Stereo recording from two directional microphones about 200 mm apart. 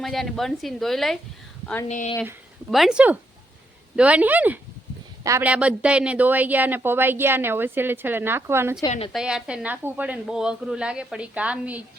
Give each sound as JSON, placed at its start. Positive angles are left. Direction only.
{"t": 0.0, "sound": "a woman's voice", "side_deg": 0}
{"t": 1.9, "sound": "speech", "side_deg": 35}
{"t": 2.6, "sound": "a woman's voice", "side_deg": 0}